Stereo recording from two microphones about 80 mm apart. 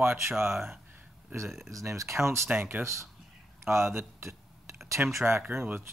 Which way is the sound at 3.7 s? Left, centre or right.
Right.